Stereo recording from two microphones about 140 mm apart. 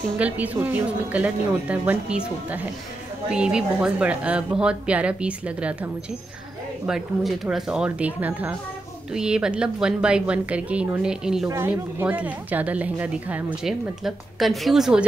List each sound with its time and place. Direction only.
0.2 s speech: 10° right (ahead or behind)
6.9 s speech: 5° right (ahead or behind)
11.4 s speech: 20° right (ahead or behind); by 15.0 s 5° right (ahead or behind)